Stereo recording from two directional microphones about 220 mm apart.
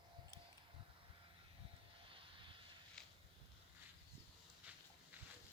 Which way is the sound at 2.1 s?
25° right (ahead or behind).